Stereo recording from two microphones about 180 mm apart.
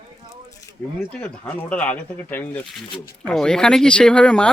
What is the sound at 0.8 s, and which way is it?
Speech, 5° left (ahead or behind).